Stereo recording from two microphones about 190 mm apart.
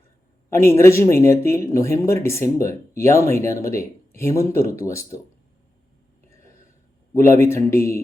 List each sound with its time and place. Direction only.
0.7 s speech: 15° left (ahead or behind)
7.1 s speech: 15° left (ahead or behind)